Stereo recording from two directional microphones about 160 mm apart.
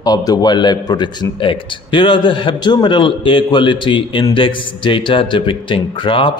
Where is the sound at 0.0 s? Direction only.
25° left (ahead or behind).